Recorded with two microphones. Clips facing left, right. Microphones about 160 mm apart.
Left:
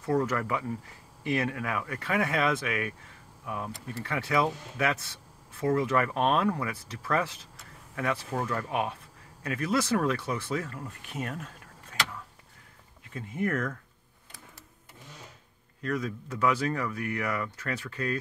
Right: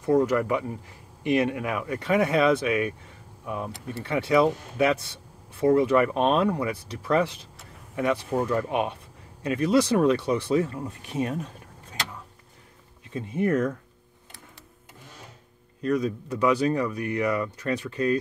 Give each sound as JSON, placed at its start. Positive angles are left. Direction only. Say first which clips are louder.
{"t": 0.0, "sound": "speech", "louder": "right 6 dB", "side_deg": -15}
{"t": 13.1, "sound": "speech", "louder": "right 6 dB", "side_deg": -25}
{"t": 15.8, "sound": "speech", "louder": "right 7 dB", "side_deg": -20}